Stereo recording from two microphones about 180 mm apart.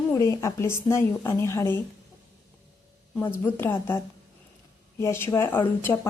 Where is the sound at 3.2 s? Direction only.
10° left (ahead or behind).